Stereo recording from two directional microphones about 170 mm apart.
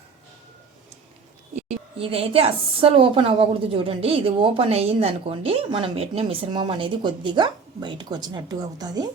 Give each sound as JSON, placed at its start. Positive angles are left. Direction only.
{"t": 2.0, "sound": "a woman's voice", "side_deg": -35}